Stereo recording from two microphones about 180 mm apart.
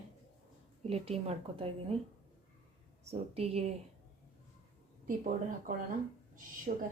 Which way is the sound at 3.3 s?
35° right (ahead or behind).